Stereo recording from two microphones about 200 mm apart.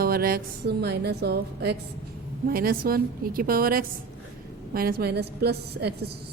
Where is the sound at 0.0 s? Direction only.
50° right (ahead or behind).